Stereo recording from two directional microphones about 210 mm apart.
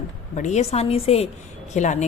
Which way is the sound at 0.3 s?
35° left (ahead or behind).